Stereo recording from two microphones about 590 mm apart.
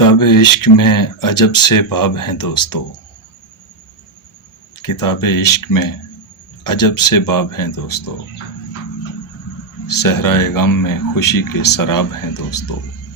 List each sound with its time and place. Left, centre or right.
0.0 s speech: left
4.8 s speech: left
9.8 s speech: left